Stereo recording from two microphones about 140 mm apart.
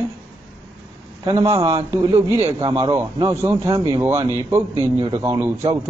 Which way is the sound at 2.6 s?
35° right (ahead or behind).